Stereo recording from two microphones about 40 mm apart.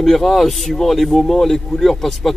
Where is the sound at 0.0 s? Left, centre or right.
Centre.